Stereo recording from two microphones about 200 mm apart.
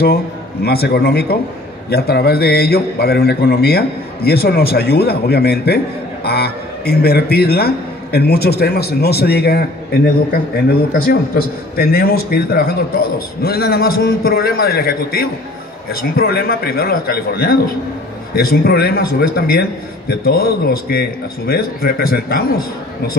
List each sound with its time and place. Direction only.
0.0 s a man's voice: 50° left (ahead or behind)